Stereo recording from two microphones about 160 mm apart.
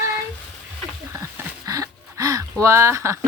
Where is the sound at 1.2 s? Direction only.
20° right (ahead or behind).